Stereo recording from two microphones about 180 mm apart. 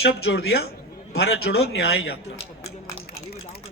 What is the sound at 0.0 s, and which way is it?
A man's voice, 65° left (ahead or behind).